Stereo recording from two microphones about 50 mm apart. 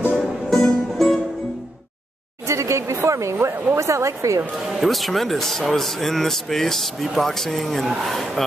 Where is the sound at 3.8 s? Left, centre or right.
Right.